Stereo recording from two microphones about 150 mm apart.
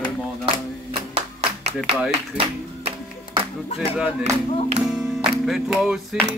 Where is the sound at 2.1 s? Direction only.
45° right (ahead or behind).